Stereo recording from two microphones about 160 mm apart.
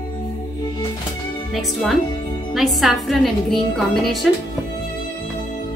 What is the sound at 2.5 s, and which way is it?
A woman's voice, centre (ahead or behind).